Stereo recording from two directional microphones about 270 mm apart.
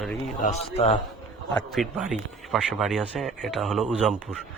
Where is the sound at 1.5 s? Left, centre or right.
Centre.